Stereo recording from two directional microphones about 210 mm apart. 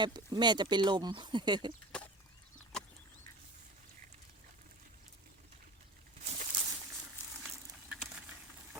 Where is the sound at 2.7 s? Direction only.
5° left (ahead or behind).